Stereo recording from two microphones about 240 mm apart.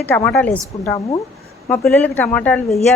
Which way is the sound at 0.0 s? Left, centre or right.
Centre.